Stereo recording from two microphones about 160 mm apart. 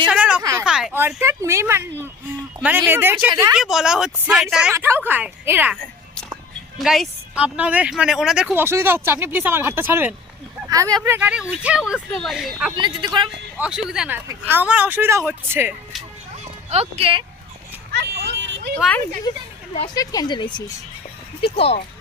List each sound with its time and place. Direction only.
0.1 s a sound: 10° right (ahead or behind)
0.9 s speech: 15° right (ahead or behind)
4.7 s speech: 15° right (ahead or behind)
5.7 s music: 5° left (ahead or behind)
6.7 s speech: centre (ahead or behind)
8.5 s speech: 15° right (ahead or behind)
12.7 s speech: 30° right (ahead or behind)
13.6 s speech: 5° right (ahead or behind)
16.9 s speech: 35° right (ahead or behind)
18.0 s vehicle: 90° right
19.9 s speech: 25° left (ahead or behind); by 21.8 s 40° left (ahead or behind)